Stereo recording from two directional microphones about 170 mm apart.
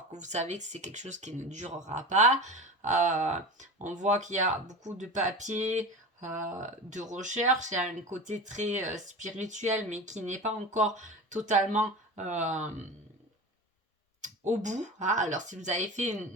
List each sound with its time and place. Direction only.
0.1 s speech: 45° right (ahead or behind)
14.2 s speech: 45° right (ahead or behind)